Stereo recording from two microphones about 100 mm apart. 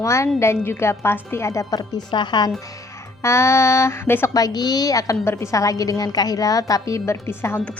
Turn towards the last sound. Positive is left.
turn(degrees=25)  # may be behind; listen again after turning